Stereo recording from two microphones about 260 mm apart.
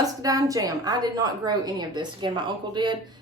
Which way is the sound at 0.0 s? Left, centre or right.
Centre.